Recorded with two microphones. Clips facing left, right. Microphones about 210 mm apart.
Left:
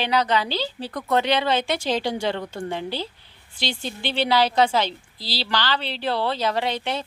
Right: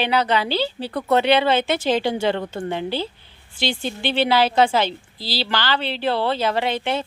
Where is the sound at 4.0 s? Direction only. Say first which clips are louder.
Right 2 dB; 55° right (ahead or behind).